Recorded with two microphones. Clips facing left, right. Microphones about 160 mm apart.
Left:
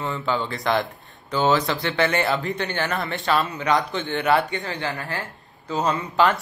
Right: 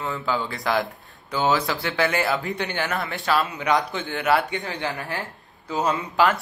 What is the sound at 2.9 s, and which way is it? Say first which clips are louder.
Speech: even; 5° right (ahead or behind).